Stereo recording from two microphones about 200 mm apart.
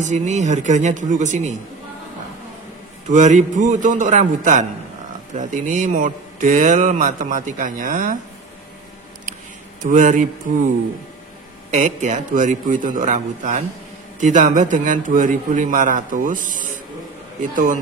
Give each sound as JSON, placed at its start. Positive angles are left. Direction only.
{"t": 0.0, "sound": "a man's voice", "side_deg": -35}
{"t": 3.1, "sound": "a man's voice", "side_deg": -35}
{"t": 9.8, "sound": "a man's voice", "side_deg": -40}
{"t": 11.7, "sound": "a man's voice", "side_deg": -35}